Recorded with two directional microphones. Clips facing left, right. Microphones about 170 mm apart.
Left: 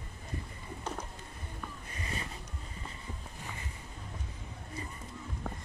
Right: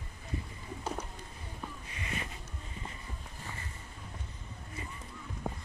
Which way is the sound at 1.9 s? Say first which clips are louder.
Even; 35° left (ahead or behind).